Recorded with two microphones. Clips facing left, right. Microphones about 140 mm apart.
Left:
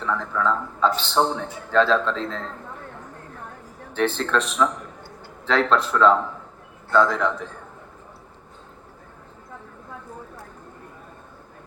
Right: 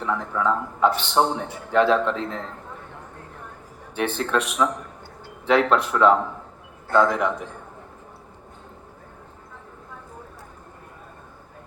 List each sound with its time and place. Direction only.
0.0 s a man's voice: 15° right (ahead or behind)
3.9 s a man's voice: 15° right (ahead or behind)